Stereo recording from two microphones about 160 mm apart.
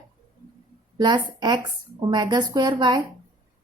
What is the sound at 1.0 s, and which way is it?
A woman's voice, 25° right (ahead or behind).